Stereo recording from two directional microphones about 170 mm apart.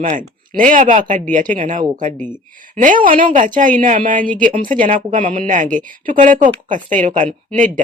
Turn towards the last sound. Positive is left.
turn(degrees=-50)  # may be behind; listen again after turning